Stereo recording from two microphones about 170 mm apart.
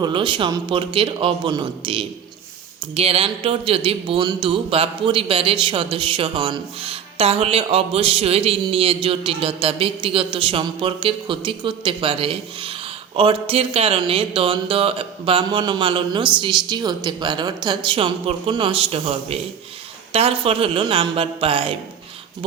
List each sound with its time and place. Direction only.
0.0 s a man's voice: 30° right (ahead or behind)